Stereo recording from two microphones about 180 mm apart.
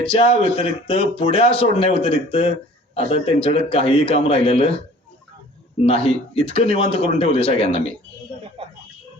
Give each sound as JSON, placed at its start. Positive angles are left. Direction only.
{"t": 0.0, "sound": "a man's voice", "side_deg": 30}
{"t": 5.8, "sound": "a man's voice", "side_deg": 30}
{"t": 8.6, "sound": "a sound", "side_deg": -30}